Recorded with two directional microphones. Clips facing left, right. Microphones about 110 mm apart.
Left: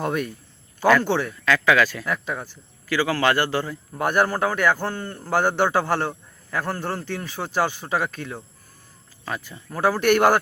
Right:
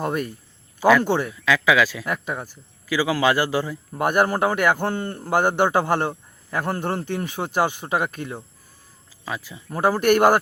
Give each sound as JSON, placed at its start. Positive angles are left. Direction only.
{"t": 0.0, "sound": "a man's voice", "side_deg": -5}